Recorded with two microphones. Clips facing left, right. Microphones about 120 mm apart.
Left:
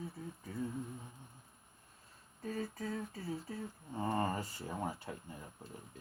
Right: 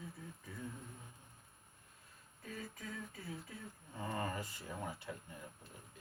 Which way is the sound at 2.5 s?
35° left (ahead or behind).